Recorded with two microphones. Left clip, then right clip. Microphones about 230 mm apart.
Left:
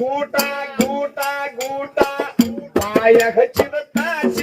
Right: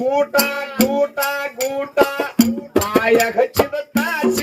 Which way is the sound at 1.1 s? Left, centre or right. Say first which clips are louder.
Right 1 dB; right.